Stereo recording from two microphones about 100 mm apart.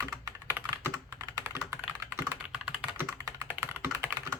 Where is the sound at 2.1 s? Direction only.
15° right (ahead or behind).